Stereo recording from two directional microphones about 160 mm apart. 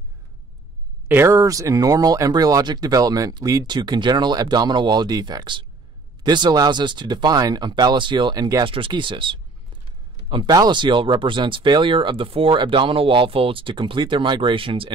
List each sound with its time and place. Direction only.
1.0 s speech: 15° right (ahead or behind); by 14.9 s 35° right (ahead or behind)